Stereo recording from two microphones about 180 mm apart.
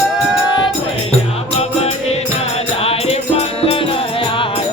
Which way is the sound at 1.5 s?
35° left (ahead or behind).